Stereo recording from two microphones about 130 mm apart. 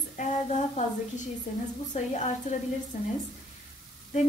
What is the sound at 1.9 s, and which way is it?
Speech, 65° left (ahead or behind).